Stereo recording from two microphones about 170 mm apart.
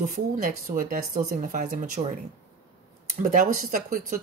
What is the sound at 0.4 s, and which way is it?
Speech, 55° right (ahead or behind).